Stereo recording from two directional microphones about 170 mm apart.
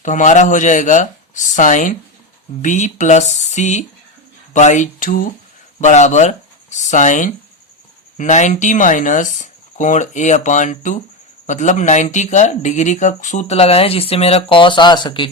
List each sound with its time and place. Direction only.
0.0 s speech: 45° left (ahead or behind); by 15.3 s 30° left (ahead or behind)